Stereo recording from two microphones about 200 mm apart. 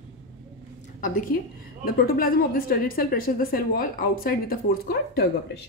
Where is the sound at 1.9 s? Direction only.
45° left (ahead or behind).